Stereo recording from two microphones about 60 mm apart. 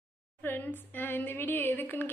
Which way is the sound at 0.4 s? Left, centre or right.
Left.